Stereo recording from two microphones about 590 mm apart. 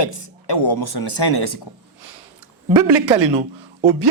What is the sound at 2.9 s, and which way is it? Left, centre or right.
Speech, right.